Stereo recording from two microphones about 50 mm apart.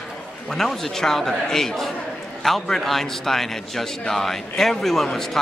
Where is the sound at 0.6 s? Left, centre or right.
Centre.